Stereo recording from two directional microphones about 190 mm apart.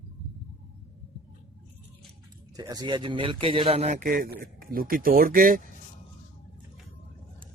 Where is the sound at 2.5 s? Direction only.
20° right (ahead or behind); by 5.6 s 45° right (ahead or behind).